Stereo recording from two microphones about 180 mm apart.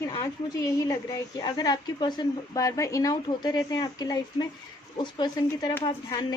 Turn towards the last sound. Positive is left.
turn(degrees=30)  # may be behind; listen again after turning